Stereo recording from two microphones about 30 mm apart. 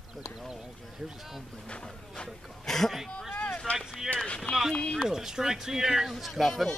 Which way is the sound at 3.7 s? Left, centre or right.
Left.